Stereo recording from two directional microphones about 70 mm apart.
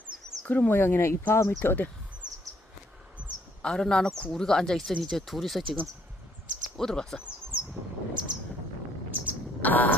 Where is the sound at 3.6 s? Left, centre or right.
Centre.